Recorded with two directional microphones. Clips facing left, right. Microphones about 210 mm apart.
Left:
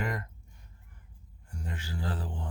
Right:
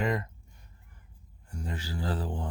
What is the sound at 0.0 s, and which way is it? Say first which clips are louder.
Speech: right 5 dB; 20° right (ahead or behind).